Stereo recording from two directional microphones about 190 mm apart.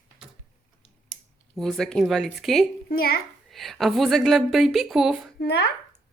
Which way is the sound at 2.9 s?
55° left (ahead or behind).